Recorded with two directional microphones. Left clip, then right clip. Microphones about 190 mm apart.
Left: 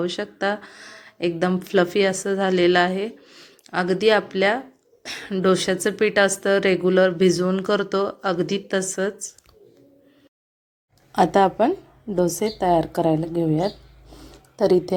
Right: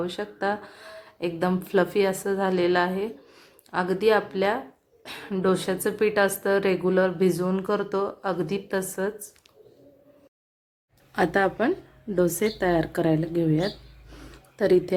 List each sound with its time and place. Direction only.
0.0 s speech: 10° left (ahead or behind)
11.1 s speech: 20° left (ahead or behind)